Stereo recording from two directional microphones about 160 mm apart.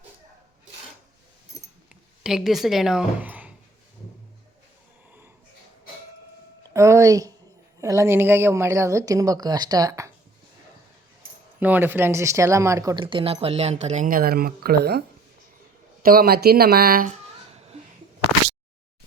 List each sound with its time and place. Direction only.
2.2 s speech: centre (ahead or behind)
6.7 s a woman's voice: 20° right (ahead or behind)
11.6 s speech: 10° right (ahead or behind)
13.1 s speech: 35° right (ahead or behind); by 15.0 s 75° right (ahead or behind)
16.0 s speech: 70° right (ahead or behind)